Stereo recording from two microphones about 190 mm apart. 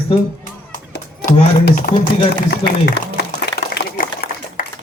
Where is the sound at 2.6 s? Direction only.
55° left (ahead or behind).